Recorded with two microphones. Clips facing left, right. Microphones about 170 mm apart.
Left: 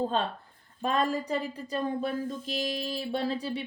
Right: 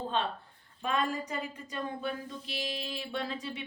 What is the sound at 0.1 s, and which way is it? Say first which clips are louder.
Speech: left 2 dB; 40° left (ahead or behind).